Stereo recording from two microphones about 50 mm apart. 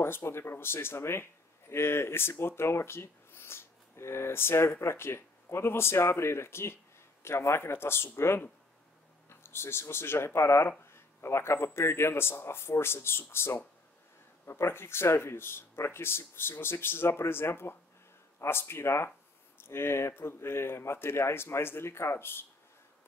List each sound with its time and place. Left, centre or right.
0.0 s speech: left